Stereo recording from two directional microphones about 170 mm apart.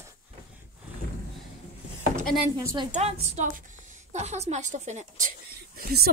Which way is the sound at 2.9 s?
40° right (ahead or behind).